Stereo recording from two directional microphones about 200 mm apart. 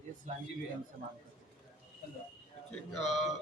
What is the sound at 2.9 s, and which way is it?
Speech, centre (ahead or behind).